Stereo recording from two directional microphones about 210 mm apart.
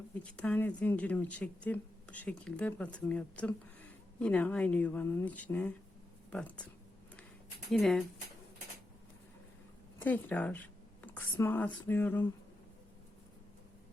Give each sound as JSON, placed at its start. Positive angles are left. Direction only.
{"t": 0.3, "sound": "speech", "side_deg": 5}
{"t": 7.7, "sound": "speech", "side_deg": 0}
{"t": 10.0, "sound": "speech", "side_deg": 10}